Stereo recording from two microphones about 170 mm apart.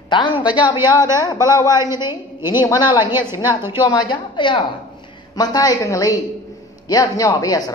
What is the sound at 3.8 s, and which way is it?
Speech, 25° left (ahead or behind).